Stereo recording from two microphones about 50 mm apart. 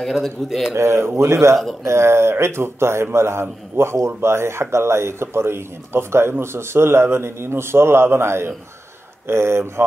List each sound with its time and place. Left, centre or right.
0.4 s a man's voice: centre
0.7 s speech: right
1.9 s a man's voice: right